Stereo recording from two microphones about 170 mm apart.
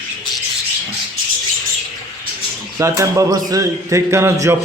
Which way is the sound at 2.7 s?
15° right (ahead or behind).